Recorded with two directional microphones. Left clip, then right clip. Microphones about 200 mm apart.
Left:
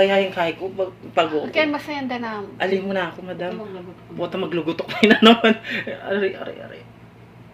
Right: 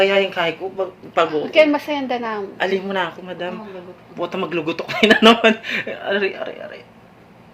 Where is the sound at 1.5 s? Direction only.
30° right (ahead or behind).